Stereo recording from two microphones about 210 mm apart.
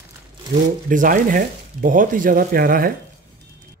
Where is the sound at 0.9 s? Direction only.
40° right (ahead or behind).